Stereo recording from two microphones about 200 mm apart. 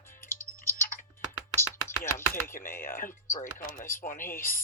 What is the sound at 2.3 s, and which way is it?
Speech, 45° left (ahead or behind).